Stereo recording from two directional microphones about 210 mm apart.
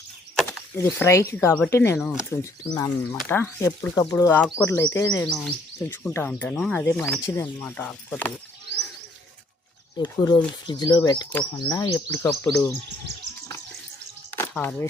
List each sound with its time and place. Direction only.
0.9 s speech: 15° left (ahead or behind)
2.0 s speech: centre (ahead or behind)
2.4 s speech: 15° left (ahead or behind)
10.0 s speech: 20° left (ahead or behind)
11.3 s speech: 5° left (ahead or behind)
11.7 s speech: 15° left (ahead or behind)
14.3 s a sound: 10° left (ahead or behind)